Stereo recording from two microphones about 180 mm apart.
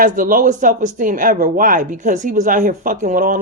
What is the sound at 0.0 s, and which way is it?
Speech, 50° right (ahead or behind).